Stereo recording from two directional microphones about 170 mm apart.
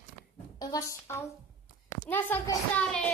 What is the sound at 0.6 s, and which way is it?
A woman's voice, 20° left (ahead or behind).